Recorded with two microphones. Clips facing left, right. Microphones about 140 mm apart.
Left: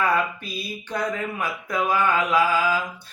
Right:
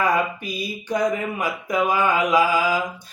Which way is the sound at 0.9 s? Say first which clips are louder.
Right 5 dB; 15° right (ahead or behind).